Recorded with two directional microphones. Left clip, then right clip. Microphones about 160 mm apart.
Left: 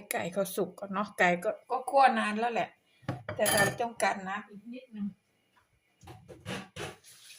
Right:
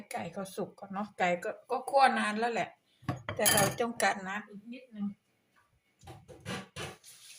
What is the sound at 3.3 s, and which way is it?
Speech, 10° right (ahead or behind).